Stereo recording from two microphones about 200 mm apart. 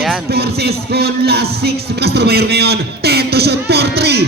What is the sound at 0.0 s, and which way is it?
Music, centre (ahead or behind).